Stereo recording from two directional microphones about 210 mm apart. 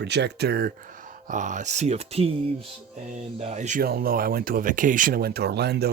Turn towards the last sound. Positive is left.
turn(degrees=-50)  # may be behind; listen again after turning